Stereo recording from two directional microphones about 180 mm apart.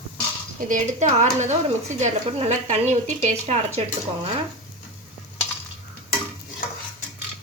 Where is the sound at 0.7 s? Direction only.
40° right (ahead or behind).